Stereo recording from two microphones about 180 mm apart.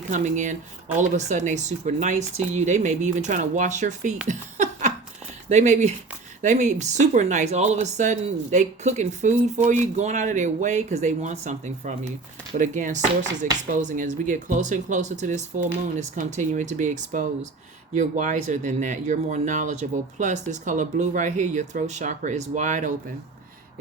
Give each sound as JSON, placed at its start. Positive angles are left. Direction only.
{"t": 0.1, "sound": "speech", "side_deg": -45}
{"t": 4.3, "sound": "a sound", "side_deg": -40}
{"t": 5.5, "sound": "speech", "side_deg": -40}